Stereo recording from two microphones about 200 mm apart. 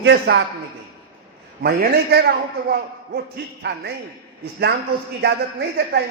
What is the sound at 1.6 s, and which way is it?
A man's voice, 55° right (ahead or behind).